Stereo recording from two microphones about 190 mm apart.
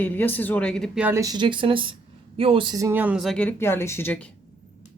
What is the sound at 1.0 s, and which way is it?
Speech, 15° right (ahead or behind).